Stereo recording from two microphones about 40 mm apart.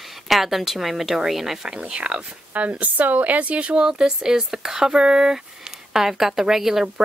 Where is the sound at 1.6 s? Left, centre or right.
Right.